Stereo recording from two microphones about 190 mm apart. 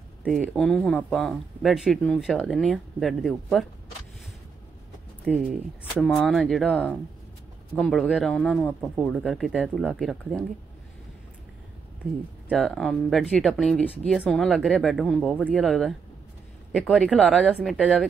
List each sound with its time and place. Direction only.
0.2 s speech: 5° right (ahead or behind)
0.6 s speech: 5° left (ahead or behind)
5.2 s speech: centre (ahead or behind)
12.4 s speech: centre (ahead or behind)